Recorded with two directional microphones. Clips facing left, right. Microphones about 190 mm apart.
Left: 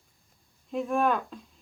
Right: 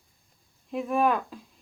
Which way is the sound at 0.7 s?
5° right (ahead or behind).